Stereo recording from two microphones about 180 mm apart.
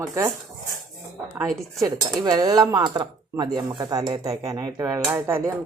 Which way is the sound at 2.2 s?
20° right (ahead or behind).